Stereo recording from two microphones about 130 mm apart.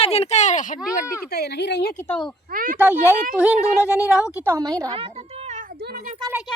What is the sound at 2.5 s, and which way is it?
Speech, 90° right.